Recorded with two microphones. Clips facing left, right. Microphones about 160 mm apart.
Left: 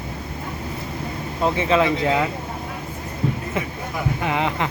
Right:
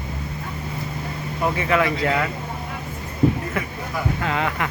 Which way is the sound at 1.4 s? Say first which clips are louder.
Left 2 dB; 20° left (ahead or behind).